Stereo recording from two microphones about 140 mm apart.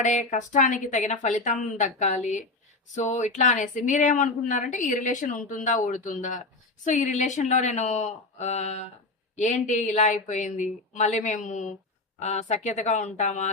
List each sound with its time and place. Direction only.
0.0 s speech: 60° left (ahead or behind)